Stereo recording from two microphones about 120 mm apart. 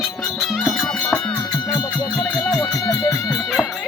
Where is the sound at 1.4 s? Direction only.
35° left (ahead or behind).